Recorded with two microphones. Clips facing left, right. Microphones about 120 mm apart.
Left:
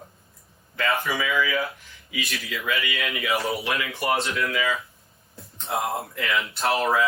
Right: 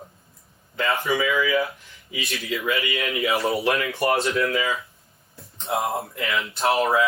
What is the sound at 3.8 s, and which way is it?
Speech, 55° right (ahead or behind).